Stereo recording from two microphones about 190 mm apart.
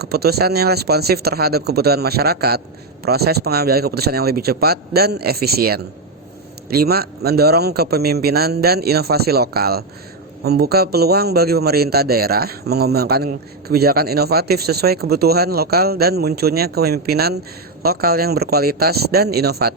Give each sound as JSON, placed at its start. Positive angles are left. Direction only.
{"t": 0.0, "sound": "a man's voice", "side_deg": -55}